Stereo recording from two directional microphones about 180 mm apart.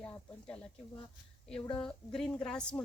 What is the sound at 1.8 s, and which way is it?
Speech, centre (ahead or behind).